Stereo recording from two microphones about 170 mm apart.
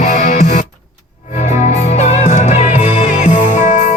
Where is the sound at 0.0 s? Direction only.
50° left (ahead or behind).